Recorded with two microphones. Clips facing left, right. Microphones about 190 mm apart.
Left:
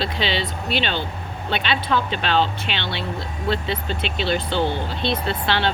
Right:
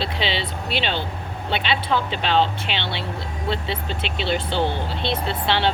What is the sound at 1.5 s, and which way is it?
A woman's voice, 25° right (ahead or behind).